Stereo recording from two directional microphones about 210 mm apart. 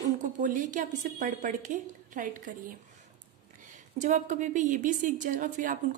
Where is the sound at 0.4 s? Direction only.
40° right (ahead or behind).